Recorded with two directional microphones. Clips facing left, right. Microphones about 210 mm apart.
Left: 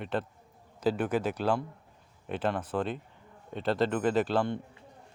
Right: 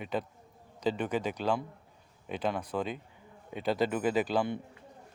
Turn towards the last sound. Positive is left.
turn(degrees=-5)  # may be behind; listen again after turning